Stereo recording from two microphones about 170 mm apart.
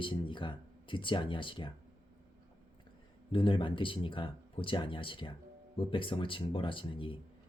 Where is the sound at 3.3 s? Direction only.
30° left (ahead or behind).